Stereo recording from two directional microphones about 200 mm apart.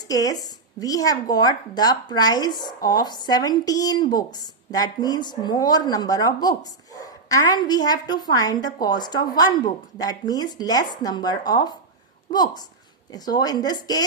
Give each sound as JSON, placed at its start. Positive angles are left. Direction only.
{"t": 0.1, "sound": "speech", "side_deg": 15}